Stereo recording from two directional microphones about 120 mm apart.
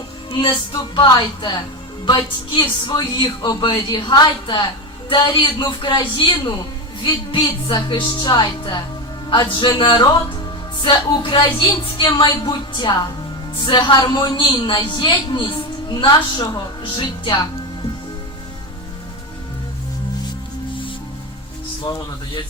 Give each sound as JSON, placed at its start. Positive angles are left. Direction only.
{"t": 0.7, "sound": "a woman's voice", "side_deg": 35}